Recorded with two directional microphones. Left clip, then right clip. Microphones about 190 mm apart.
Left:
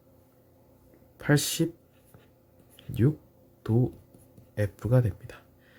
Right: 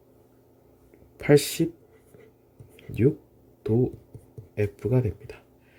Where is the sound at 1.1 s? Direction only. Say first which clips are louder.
Right 7 dB; 10° right (ahead or behind).